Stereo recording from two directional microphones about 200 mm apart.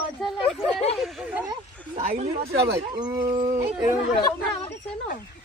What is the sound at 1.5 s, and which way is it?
Speech, 30° right (ahead or behind).